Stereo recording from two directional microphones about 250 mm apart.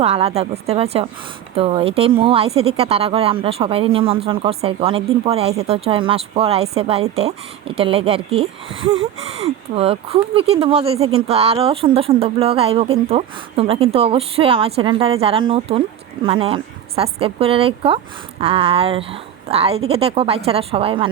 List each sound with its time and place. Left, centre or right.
0.0 s speech: right